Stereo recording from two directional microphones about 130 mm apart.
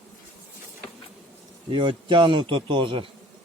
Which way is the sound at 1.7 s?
40° right (ahead or behind).